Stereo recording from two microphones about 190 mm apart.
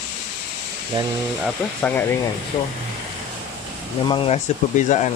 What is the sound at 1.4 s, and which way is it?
Speech, 10° left (ahead or behind).